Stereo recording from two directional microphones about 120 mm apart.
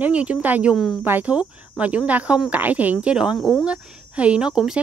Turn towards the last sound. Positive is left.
turn(degrees=-5)  # may be behind; listen again after turning